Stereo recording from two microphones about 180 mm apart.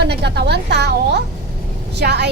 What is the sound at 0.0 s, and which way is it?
A woman's voice, 65° right (ahead or behind).